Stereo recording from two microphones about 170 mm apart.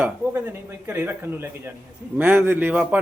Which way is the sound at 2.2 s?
10° right (ahead or behind).